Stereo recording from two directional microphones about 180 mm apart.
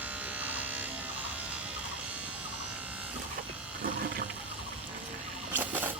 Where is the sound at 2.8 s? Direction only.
10° right (ahead or behind).